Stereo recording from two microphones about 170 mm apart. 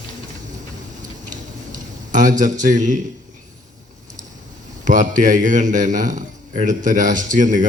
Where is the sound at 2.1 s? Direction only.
50° right (ahead or behind).